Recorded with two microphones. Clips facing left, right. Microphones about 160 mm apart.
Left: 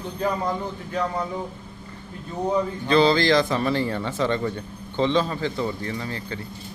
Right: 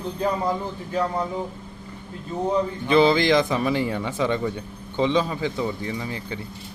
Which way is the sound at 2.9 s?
20° right (ahead or behind).